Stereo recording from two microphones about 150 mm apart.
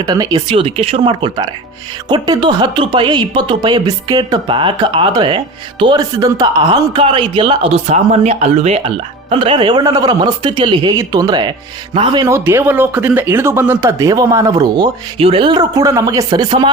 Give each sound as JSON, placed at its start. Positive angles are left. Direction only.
{"t": 0.0, "sound": "speech", "side_deg": -25}
{"t": 0.5, "sound": "speech", "side_deg": -40}
{"t": 9.3, "sound": "speech", "side_deg": -35}
{"t": 12.5, "sound": "speech", "side_deg": -15}
{"t": 15.2, "sound": "speech", "side_deg": -40}